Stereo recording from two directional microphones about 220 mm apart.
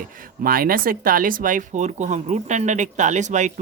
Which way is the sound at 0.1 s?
40° right (ahead or behind).